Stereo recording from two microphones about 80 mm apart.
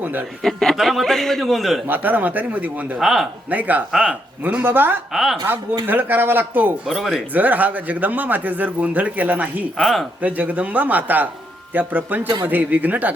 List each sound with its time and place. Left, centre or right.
0.0 s speech: right
0.4 s a man's voice: centre
1.9 s a man's voice: right
3.0 s a man's voice: centre
3.5 s a man's voice: right
5.1 s a man's voice: centre
5.8 s a man's voice: right
6.8 s a man's voice: centre
7.3 s a man's voice: right
9.7 s a man's voice: centre
10.2 s a man's voice: centre